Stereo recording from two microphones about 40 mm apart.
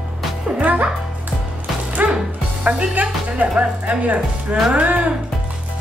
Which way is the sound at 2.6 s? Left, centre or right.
Right.